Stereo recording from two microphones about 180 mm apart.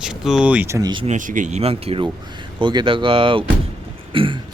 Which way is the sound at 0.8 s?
25° right (ahead or behind).